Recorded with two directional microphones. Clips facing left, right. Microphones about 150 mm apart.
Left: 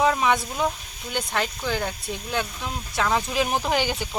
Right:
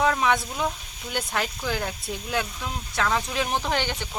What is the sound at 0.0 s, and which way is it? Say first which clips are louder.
Speech: left 1 dB; 5° left (ahead or behind).